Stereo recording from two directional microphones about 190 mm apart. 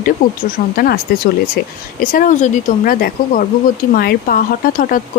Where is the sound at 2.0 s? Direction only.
45° left (ahead or behind).